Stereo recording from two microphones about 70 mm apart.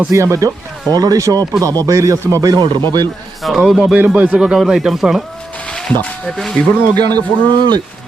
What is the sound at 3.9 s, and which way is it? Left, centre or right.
Speech, right.